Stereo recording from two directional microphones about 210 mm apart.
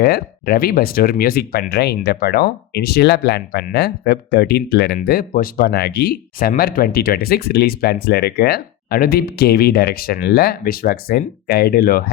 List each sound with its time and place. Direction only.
0.0 s speech: 50° left (ahead or behind)